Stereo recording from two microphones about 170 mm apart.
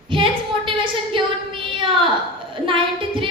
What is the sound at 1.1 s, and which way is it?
Child singing, 30° right (ahead or behind).